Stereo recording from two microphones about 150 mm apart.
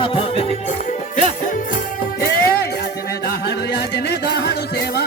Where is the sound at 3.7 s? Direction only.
90° left.